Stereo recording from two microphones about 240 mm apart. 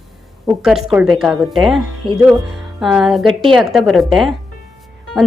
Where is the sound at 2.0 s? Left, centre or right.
Right.